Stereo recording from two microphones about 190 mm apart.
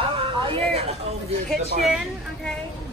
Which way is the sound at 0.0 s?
25° right (ahead or behind).